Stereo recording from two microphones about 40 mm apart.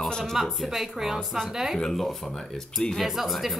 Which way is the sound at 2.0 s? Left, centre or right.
Centre.